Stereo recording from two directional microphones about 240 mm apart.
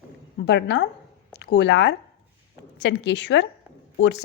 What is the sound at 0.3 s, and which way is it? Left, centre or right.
A woman's voice, left.